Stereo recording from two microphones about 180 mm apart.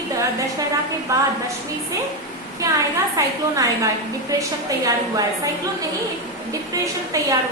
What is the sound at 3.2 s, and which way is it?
Speech, 20° right (ahead or behind).